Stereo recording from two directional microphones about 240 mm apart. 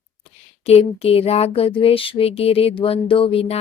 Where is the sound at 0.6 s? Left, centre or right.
Left.